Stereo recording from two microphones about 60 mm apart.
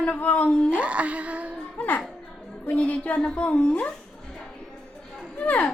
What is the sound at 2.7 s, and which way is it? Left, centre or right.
A woman's voice, left.